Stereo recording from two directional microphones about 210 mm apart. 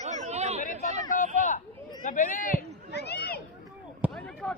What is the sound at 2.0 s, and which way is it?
Run, 40° left (ahead or behind).